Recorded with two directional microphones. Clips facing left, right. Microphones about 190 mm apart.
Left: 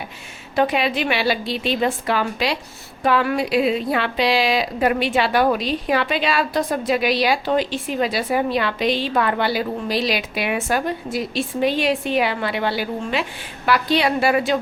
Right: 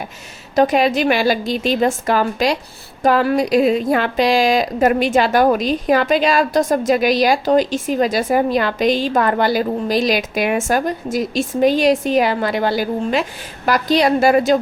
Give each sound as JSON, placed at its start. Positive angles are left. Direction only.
{"t": 0.5, "sound": "a woman's voice", "side_deg": -40}